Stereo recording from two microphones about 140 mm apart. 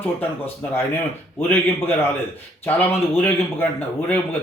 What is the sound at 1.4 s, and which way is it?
Speech, 15° left (ahead or behind).